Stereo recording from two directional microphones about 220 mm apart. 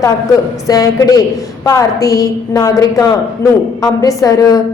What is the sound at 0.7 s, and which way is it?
A woman's voice, 15° left (ahead or behind).